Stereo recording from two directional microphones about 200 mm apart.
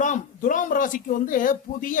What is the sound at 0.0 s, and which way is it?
A man's voice, 40° left (ahead or behind).